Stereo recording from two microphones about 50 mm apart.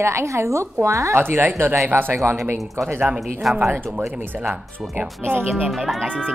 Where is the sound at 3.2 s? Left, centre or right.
Centre.